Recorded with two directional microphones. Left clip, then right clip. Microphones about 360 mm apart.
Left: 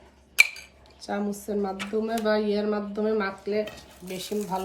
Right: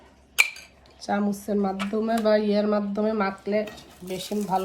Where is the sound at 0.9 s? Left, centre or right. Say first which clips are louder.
Right 4 dB; centre.